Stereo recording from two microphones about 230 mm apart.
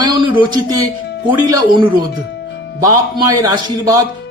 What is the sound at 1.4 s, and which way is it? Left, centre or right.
Speech, centre.